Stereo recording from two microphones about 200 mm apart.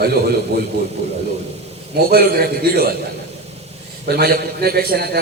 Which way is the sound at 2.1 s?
50° right (ahead or behind).